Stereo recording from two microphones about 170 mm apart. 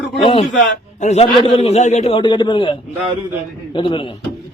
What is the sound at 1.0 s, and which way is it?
A man's voice, 40° left (ahead or behind).